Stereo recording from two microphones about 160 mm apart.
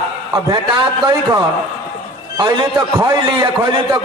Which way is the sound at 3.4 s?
25° right (ahead or behind).